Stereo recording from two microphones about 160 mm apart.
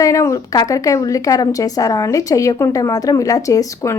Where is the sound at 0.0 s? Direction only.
20° left (ahead or behind).